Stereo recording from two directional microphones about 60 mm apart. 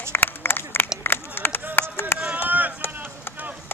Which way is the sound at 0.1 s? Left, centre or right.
Left.